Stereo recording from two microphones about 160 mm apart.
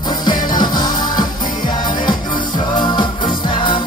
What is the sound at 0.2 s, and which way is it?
Music, 25° left (ahead or behind).